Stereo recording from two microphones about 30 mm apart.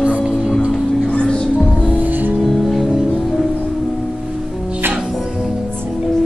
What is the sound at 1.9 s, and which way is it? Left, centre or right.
Music, right.